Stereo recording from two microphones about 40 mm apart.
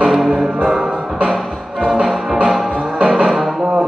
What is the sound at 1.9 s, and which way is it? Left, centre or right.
Music, centre.